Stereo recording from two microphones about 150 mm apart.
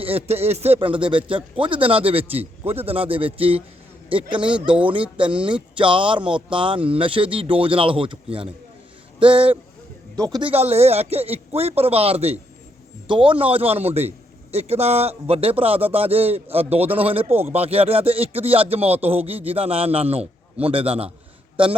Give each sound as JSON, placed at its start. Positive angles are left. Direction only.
{"t": 0.0, "sound": "a man's voice", "side_deg": -40}
{"t": 4.6, "sound": "speech", "side_deg": -5}
{"t": 5.7, "sound": "a man's voice", "side_deg": -35}
{"t": 10.2, "sound": "speech", "side_deg": -25}
{"t": 10.4, "sound": "a man's voice", "side_deg": -45}